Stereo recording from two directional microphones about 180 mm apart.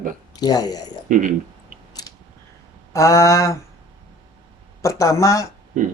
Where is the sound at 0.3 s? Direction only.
20° left (ahead or behind).